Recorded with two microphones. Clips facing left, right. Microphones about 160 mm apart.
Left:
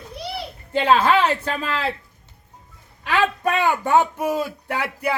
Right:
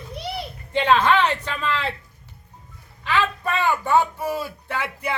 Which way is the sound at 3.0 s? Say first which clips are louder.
Left 2 dB; 45° left (ahead or behind).